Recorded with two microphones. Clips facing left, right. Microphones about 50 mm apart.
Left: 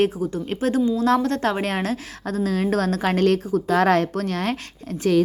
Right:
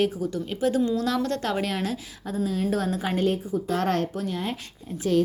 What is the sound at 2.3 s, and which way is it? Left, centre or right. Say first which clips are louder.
A woman's voice: left 4 dB; left.